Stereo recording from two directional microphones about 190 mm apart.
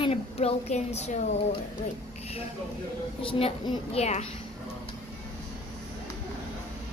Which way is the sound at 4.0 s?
35° left (ahead or behind).